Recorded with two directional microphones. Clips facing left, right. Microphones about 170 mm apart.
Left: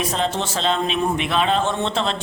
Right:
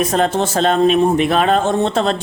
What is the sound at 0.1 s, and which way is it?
Speech, 45° right (ahead or behind).